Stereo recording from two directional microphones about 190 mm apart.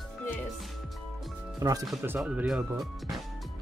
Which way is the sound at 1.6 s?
20° right (ahead or behind).